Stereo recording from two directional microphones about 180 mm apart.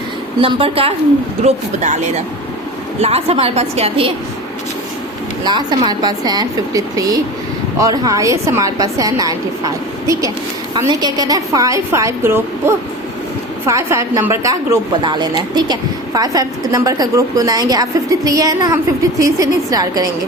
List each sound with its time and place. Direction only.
0.4 s a woman's voice: 30° right (ahead or behind)
5.5 s a woman's voice: 25° right (ahead or behind)